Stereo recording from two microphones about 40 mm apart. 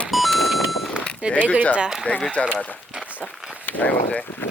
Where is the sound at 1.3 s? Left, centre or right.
Left.